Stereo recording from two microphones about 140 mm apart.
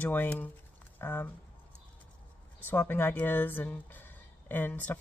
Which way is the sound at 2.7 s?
15° left (ahead or behind).